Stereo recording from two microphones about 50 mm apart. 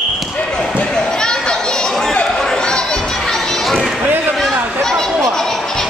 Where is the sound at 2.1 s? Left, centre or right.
Centre.